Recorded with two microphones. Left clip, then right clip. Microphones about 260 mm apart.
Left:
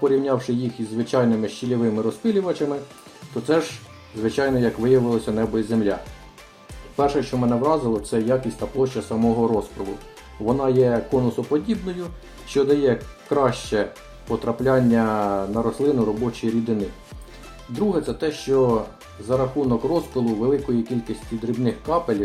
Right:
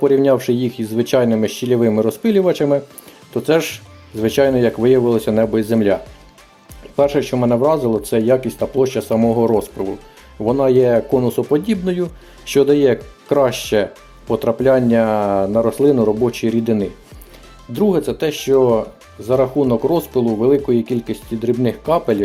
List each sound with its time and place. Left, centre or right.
0.0 s speech: right
17.7 s speech: right